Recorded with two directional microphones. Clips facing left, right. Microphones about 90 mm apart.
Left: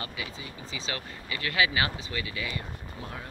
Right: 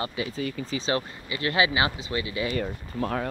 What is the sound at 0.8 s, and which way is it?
Speech, 35° right (ahead or behind).